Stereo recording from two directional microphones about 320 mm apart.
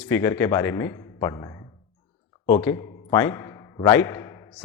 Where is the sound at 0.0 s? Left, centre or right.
Centre.